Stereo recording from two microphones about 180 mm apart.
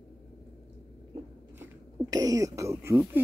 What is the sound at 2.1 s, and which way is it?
Throat clearing, 20° right (ahead or behind).